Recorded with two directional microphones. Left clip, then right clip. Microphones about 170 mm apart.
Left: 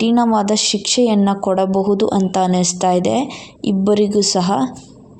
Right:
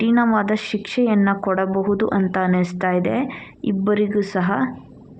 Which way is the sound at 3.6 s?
35° left (ahead or behind).